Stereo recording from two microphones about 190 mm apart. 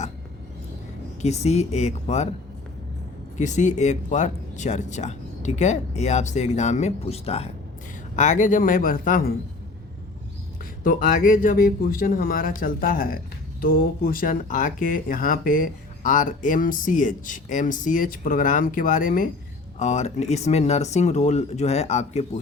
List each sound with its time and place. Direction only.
1.2 s speech: 35° left (ahead or behind)
3.3 s speech: 40° left (ahead or behind)
10.8 s speech: 45° left (ahead or behind)